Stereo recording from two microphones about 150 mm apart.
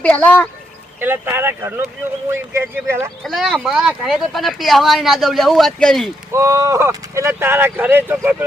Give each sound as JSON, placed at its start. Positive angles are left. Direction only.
{"t": 0.0, "sound": "speech", "side_deg": 10}
{"t": 0.9, "sound": "speech", "side_deg": -15}
{"t": 3.2, "sound": "speech", "side_deg": 0}
{"t": 6.3, "sound": "speech", "side_deg": -20}